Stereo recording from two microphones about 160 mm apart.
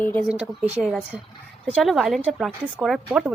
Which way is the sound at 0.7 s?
5° right (ahead or behind).